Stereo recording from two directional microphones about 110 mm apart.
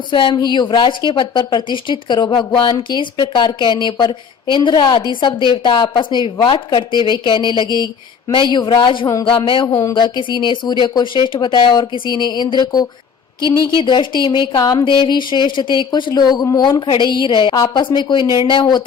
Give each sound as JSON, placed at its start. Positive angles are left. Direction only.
{"t": 0.1, "sound": "a woman's voice", "side_deg": 50}
{"t": 14.5, "sound": "a woman's voice", "side_deg": 35}
{"t": 14.8, "sound": "a woman's voice", "side_deg": 45}
{"t": 17.5, "sound": "a woman's voice", "side_deg": 35}
{"t": 17.8, "sound": "a woman's voice", "side_deg": 45}